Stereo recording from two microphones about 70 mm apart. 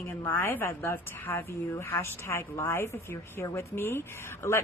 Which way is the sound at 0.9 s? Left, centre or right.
Left.